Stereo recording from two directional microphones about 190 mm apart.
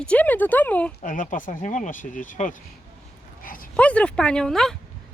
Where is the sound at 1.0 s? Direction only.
45° left (ahead or behind).